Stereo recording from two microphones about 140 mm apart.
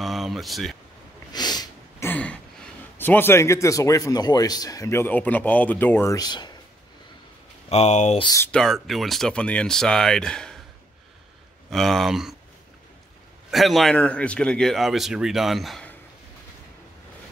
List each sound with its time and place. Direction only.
0.0 s a sound: centre (ahead or behind)
1.3 s snort: 30° left (ahead or behind)
2.0 s a sound: 10° left (ahead or behind)
3.0 s a man's voice: 15° left (ahead or behind)
6.1 s speech: 30° left (ahead or behind)
7.7 s speech: 55° left (ahead or behind)
8.5 s a man's voice: 5° left (ahead or behind)
11.7 s a man's voice: centre (ahead or behind)
13.5 s a man's voice: centre (ahead or behind)